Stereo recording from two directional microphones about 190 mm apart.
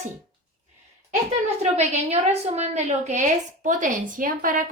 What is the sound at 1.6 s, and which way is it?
Speech, 35° right (ahead or behind).